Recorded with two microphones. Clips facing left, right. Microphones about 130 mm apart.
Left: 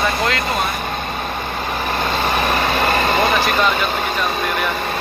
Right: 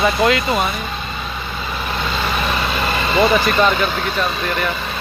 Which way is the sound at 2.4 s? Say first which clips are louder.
Left 3 dB; 45° left (ahead or behind).